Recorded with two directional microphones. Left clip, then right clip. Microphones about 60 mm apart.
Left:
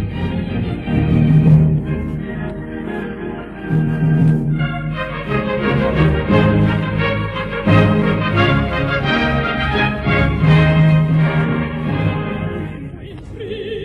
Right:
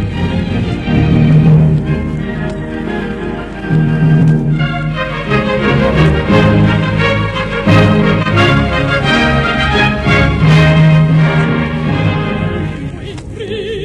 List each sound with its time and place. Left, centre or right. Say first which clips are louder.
0.8 s music: right 5 dB; right
3.7 s organ: right 5 dB; right
5.3 s music: right 5 dB; right